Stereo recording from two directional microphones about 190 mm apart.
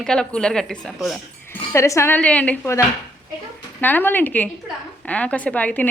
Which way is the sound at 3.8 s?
10° left (ahead or behind).